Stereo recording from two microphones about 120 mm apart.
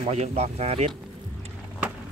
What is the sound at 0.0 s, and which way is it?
Speech, 75° right (ahead or behind).